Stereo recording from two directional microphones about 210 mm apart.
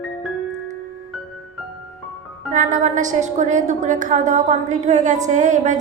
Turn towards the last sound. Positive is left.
turn(degrees=-35)  # may be behind; listen again after turning